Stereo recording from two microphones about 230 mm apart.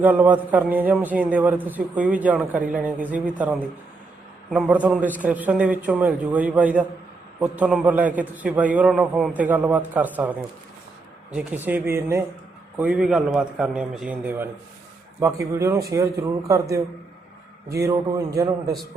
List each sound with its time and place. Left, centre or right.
0.0 s a man's voice: centre
11.3 s a man's voice: centre